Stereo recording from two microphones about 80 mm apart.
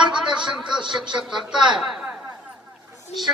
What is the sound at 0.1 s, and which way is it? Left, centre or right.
A man's voice, centre.